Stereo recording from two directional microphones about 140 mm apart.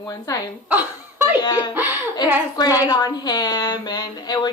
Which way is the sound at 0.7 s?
15° right (ahead or behind).